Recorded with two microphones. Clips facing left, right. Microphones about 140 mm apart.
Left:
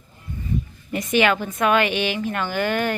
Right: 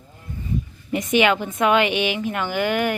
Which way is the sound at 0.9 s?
20° right (ahead or behind).